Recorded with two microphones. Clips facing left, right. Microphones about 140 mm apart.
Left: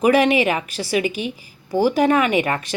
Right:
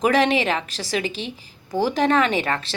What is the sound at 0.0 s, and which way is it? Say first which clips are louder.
Speech: left 3 dB; 10° left (ahead or behind).